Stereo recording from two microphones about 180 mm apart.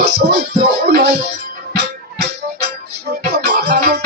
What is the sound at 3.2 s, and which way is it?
Music, 60° right (ahead or behind).